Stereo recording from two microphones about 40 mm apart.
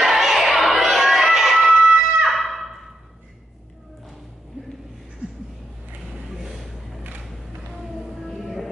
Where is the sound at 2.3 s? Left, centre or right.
Centre.